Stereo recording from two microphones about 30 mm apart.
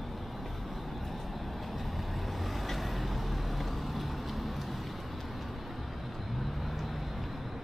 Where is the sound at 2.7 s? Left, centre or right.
Centre.